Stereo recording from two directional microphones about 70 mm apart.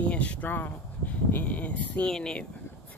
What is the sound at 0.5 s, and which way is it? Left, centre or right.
Speech, left.